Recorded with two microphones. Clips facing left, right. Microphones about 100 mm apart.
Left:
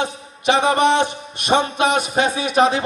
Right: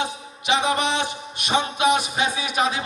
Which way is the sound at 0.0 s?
55° left (ahead or behind).